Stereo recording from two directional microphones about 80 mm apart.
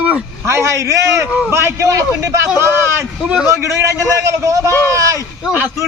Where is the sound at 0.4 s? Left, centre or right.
Right.